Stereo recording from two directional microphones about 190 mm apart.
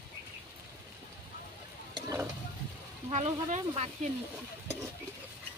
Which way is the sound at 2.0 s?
15° right (ahead or behind).